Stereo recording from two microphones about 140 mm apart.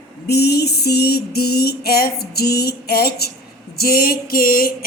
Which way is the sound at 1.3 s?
90° left.